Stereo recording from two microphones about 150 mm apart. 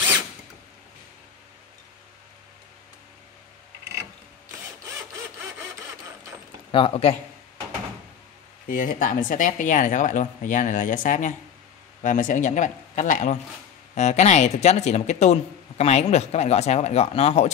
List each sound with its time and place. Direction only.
6.7 s speech: 40° left (ahead or behind)
8.6 s speech: 65° left (ahead or behind); by 17.5 s 45° left (ahead or behind)